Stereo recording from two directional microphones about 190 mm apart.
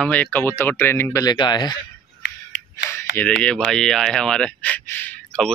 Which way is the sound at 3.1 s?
5° left (ahead or behind).